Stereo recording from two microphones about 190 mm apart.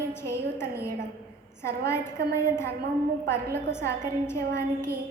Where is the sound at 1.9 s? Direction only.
15° left (ahead or behind).